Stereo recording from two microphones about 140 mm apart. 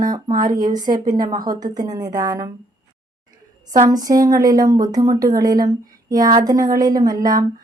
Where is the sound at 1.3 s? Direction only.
30° right (ahead or behind).